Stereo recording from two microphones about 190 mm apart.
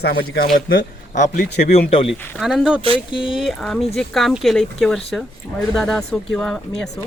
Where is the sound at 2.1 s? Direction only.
Centre (ahead or behind).